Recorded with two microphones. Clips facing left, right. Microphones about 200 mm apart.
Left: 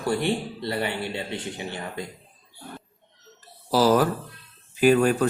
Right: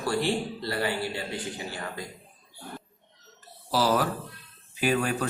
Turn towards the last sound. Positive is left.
turn(degrees=45)  # may be behind; listen again after turning